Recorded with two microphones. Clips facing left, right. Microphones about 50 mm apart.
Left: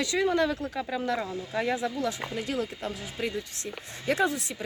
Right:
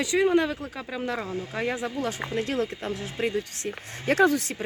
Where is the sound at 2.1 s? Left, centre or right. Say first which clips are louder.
Right 3 dB; right.